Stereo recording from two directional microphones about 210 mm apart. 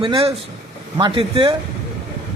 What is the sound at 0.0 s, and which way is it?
A man's voice, 25° right (ahead or behind).